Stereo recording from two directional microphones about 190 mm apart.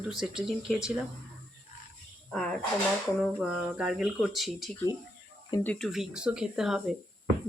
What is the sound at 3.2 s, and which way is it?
Speech, centre (ahead or behind).